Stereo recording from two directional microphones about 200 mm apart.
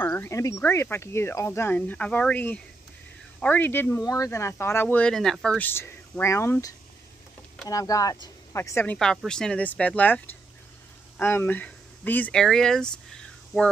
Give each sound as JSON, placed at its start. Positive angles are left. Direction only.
{"t": 0.0, "sound": "speech", "side_deg": 10}